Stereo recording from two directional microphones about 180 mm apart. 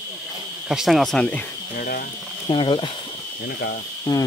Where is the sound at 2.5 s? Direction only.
25° left (ahead or behind).